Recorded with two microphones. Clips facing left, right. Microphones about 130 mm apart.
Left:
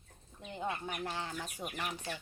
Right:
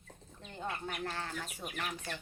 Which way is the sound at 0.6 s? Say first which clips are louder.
Left 1 dB; 15° left (ahead or behind).